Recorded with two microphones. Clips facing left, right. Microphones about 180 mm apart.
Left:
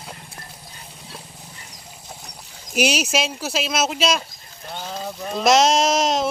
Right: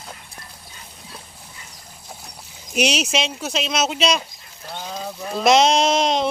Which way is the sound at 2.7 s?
5° left (ahead or behind).